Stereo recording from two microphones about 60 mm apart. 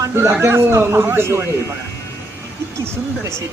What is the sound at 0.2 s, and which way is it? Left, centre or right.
A man's voice, right.